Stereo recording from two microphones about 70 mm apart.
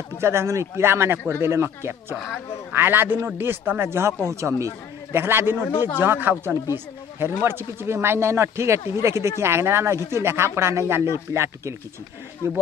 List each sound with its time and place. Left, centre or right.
0.2 s a man's voice: right
5.2 s a man's voice: right